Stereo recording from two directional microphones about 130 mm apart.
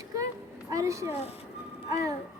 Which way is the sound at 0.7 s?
25° right (ahead or behind).